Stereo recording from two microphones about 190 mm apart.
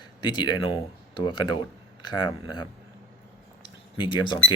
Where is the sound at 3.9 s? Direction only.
25° left (ahead or behind).